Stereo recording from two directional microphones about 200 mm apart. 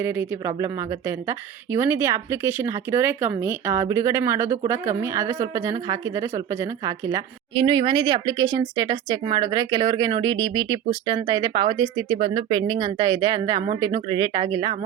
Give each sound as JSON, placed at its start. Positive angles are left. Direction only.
{"t": 0.0, "sound": "a woman's voice", "side_deg": -10}